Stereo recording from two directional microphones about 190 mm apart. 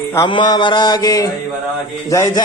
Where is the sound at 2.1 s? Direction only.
15° left (ahead or behind).